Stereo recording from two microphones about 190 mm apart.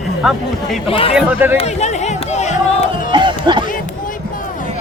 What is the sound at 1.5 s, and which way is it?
Music, 35° left (ahead or behind).